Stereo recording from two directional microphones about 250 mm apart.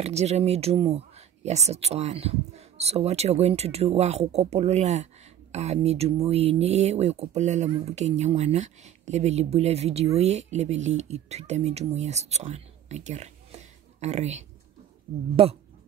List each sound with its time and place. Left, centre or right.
0.0 s speech: right